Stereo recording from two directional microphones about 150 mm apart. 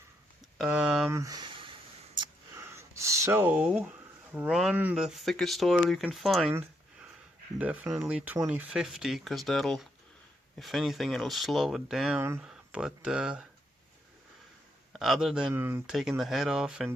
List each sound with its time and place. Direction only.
0.7 s speech: 5° right (ahead or behind)
1.1 s a sound: 20° right (ahead or behind)
2.7 s rub: 20° right (ahead or behind)
4.3 s speech: 10° right (ahead or behind)
4.5 s speech: centre (ahead or behind)
7.6 s speech: 10° right (ahead or behind)
14.9 s speech: centre (ahead or behind)
15.5 s speech: 15° right (ahead or behind)
15.9 s speech: centre (ahead or behind)